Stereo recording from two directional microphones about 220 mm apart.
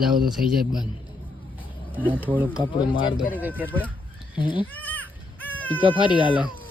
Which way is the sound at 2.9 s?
25° left (ahead or behind).